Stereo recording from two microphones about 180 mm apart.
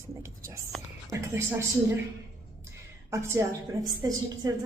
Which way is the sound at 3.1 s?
15° right (ahead or behind).